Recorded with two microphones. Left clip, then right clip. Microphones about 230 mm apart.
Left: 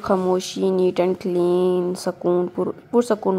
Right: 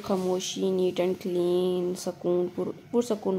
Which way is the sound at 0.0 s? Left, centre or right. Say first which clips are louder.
Left 8 dB; left.